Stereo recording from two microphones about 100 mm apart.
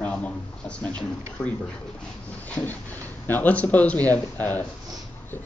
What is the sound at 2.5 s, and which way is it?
Speech, 15° left (ahead or behind).